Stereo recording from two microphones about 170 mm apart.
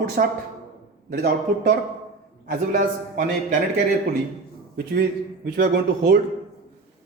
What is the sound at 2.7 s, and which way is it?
Speech, 60° right (ahead or behind).